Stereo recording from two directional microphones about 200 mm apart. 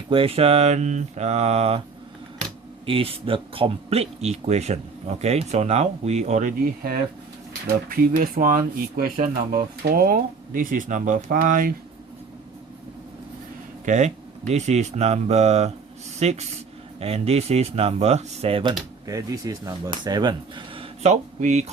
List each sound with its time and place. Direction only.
0.1 s speech: 25° right (ahead or behind)
2.8 s speech: 25° right (ahead or behind); by 11.7 s 45° right (ahead or behind)
13.8 s speech: 35° right (ahead or behind)